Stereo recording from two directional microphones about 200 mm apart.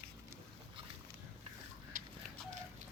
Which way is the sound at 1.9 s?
40° right (ahead or behind).